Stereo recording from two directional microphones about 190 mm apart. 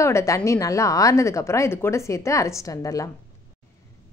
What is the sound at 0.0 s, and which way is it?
A woman's voice, 15° left (ahead or behind).